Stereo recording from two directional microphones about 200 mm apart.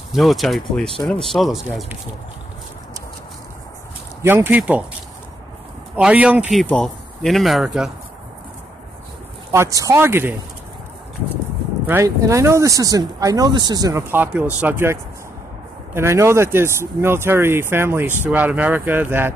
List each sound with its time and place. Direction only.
0.1 s speech: centre (ahead or behind)
4.2 s speech: 10° right (ahead or behind)
5.9 s speech: 5° right (ahead or behind)
6.6 s speech: 5° left (ahead or behind)
9.5 s speech: 15° right (ahead or behind)
11.8 s speech: 10° right (ahead or behind)